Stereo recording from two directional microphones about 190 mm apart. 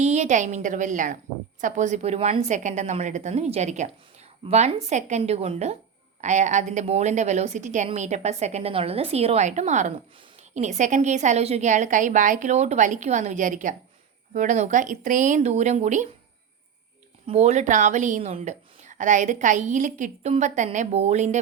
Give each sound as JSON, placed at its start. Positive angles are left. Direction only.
{"t": 0.0, "sound": "a woman's voice", "side_deg": -35}
{"t": 17.2, "sound": "a woman's voice", "side_deg": -35}